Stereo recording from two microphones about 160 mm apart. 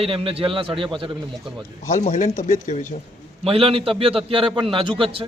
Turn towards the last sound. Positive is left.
turn(degrees=-35)  # may be behind; listen again after turning